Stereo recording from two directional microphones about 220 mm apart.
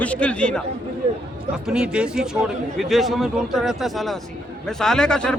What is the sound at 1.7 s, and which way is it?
A man's voice, 5° right (ahead or behind).